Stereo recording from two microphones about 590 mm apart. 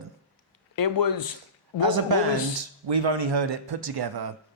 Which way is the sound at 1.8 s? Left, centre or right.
Right.